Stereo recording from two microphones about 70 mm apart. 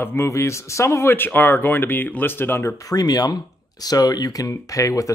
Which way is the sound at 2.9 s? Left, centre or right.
Left.